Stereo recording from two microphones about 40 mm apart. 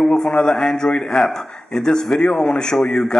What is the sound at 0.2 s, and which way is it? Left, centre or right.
A man's voice, left.